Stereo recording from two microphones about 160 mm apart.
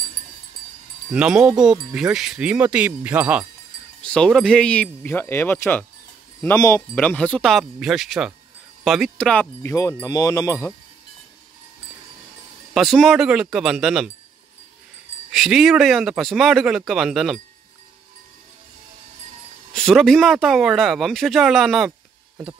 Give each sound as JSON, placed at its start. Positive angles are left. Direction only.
{"t": 1.1, "sound": "speech", "side_deg": -5}
{"t": 4.0, "sound": "cowbell", "side_deg": 5}
{"t": 7.0, "sound": "speech", "side_deg": 5}
{"t": 8.8, "sound": "cowbell", "side_deg": 0}
{"t": 12.7, "sound": "speech", "side_deg": 0}
{"t": 15.3, "sound": "speech", "side_deg": 0}
{"t": 19.7, "sound": "speech", "side_deg": 5}